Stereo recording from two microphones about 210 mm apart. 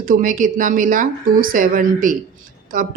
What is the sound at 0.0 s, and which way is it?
Speech, 40° right (ahead or behind).